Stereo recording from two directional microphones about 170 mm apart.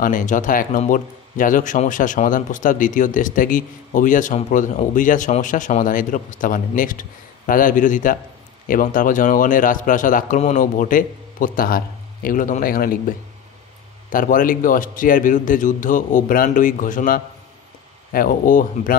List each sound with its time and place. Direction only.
0.0 s a man's voice: 50° left (ahead or behind)
14.1 s a man's voice: 55° left (ahead or behind)